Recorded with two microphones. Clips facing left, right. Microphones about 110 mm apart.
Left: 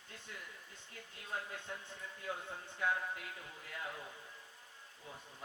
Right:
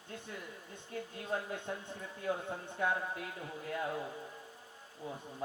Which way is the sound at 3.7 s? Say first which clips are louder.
Right 9 dB; 30° right (ahead or behind).